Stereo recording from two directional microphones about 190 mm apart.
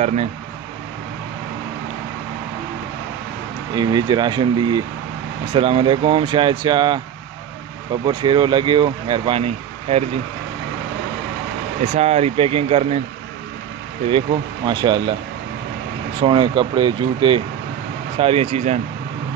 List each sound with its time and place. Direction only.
0.0 s speech: 35° right (ahead or behind)
3.7 s speech: 20° right (ahead or behind)
11.8 s speech: 40° right (ahead or behind)
14.0 s speech: 25° right (ahead or behind)
16.2 s speech: 25° right (ahead or behind)